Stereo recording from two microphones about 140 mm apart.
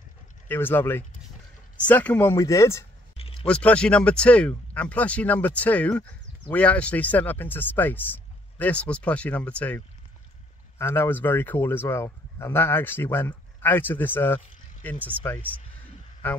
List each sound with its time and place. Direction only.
0.5 s speech: 15° left (ahead or behind)
2.3 s speech: 25° left (ahead or behind)
3.2 s a sound: 45° left (ahead or behind)
3.4 s speech: 10° left (ahead or behind)